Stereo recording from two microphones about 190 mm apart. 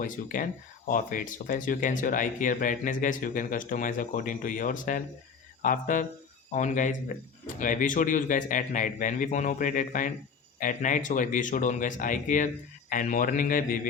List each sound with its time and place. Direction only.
0.0 s speech: 45° left (ahead or behind)